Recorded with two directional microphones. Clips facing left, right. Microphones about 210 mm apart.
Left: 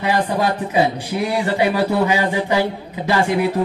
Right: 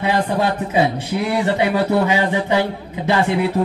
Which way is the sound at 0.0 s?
25° right (ahead or behind).